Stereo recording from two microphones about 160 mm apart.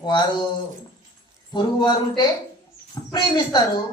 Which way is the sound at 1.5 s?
30° left (ahead or behind).